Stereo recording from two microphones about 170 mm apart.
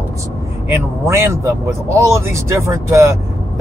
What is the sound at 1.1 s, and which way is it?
Speech, 15° right (ahead or behind).